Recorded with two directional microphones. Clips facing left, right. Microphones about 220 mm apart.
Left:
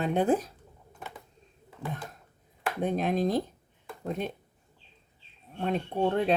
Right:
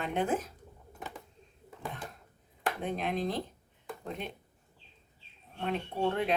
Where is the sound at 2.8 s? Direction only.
40° left (ahead or behind).